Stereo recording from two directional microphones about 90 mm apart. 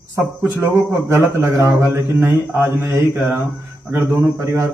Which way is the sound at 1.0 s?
30° right (ahead or behind).